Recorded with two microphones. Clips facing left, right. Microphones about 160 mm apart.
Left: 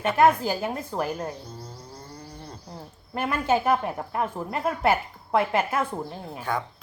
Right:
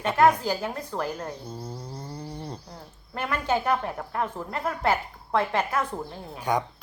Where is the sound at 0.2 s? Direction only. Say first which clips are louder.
Even; 15° left (ahead or behind).